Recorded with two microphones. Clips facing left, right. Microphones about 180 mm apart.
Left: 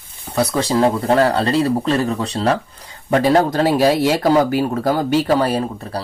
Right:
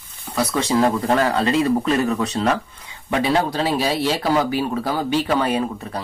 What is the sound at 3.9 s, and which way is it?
Speech, 10° left (ahead or behind).